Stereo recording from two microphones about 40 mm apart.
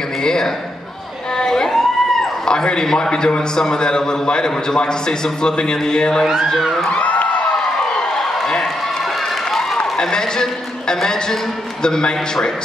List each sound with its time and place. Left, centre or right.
0.2 s a man's voice: centre
1.4 s a sound: centre
2.4 s a man's voice: centre
6.9 s speech: left
8.2 s a sound: centre
9.9 s a man's voice: centre